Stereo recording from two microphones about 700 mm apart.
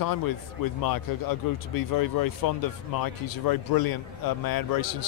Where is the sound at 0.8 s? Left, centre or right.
Left.